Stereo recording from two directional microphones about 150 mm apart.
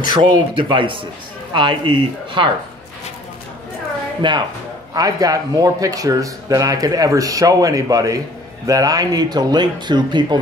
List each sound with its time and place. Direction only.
0.1 s speech: 35° right (ahead or behind)
4.2 s speech: 30° right (ahead or behind)